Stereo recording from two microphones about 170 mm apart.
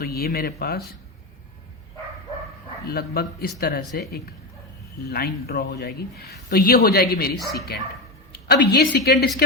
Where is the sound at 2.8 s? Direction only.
65° left (ahead or behind).